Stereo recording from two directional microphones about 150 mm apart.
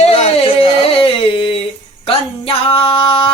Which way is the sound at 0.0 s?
45° left (ahead or behind).